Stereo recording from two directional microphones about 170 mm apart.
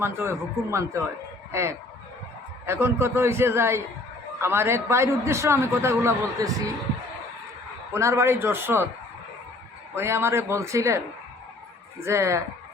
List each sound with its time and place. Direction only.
0.0 s a man's voice: 15° right (ahead or behind)
2.6 s a man's voice: 15° right (ahead or behind)
7.9 s a man's voice: 15° right (ahead or behind)
9.9 s a man's voice: 15° right (ahead or behind)